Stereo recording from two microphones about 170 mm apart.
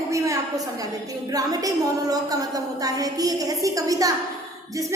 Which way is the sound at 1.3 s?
20° right (ahead or behind).